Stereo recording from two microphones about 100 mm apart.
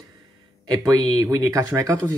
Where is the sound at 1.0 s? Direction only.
45° right (ahead or behind).